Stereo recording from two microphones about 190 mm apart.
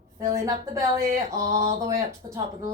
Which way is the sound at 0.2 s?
15° right (ahead or behind).